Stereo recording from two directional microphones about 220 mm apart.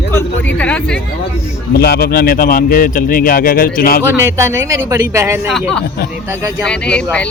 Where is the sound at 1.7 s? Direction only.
45° left (ahead or behind).